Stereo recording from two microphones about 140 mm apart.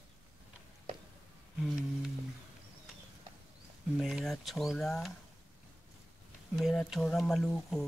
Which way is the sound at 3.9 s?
Centre (ahead or behind).